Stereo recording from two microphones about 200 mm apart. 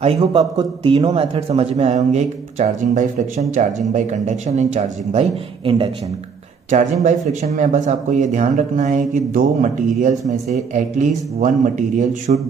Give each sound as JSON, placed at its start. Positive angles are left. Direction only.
{"t": 0.0, "sound": "a man's voice", "side_deg": -30}
{"t": 6.7, "sound": "a man's voice", "side_deg": -35}